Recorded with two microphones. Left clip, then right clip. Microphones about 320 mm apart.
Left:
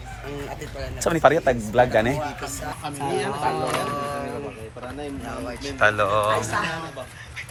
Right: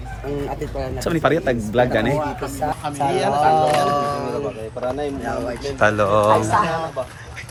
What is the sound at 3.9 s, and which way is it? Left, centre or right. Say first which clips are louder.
Speech: right 7 dB; right.